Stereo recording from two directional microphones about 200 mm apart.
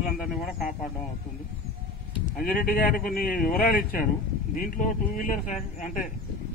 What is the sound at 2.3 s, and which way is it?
Speech, 45° left (ahead or behind).